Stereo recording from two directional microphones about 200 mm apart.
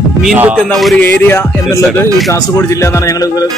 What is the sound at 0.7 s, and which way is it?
Speech, centre (ahead or behind).